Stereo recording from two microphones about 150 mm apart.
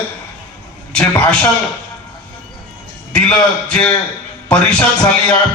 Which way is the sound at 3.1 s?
10° left (ahead or behind).